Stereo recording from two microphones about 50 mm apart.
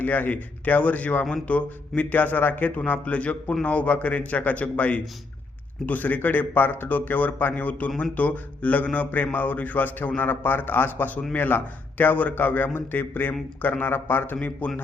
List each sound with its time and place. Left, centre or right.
0.0 s a man's voice: left